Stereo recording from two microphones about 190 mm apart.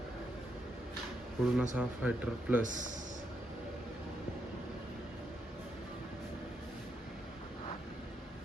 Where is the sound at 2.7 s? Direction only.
40° right (ahead or behind).